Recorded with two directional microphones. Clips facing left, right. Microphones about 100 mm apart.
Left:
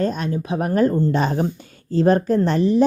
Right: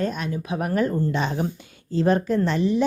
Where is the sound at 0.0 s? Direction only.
35° left (ahead or behind).